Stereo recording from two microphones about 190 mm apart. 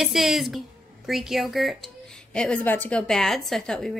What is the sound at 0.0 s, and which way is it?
A woman's voice, centre (ahead or behind).